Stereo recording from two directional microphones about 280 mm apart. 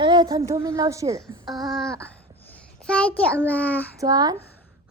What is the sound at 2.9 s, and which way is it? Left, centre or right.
Speech, centre.